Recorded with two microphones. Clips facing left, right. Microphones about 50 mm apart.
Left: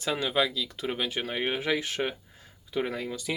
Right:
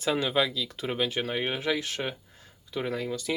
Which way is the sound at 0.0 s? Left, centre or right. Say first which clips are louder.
Right 1 dB; centre.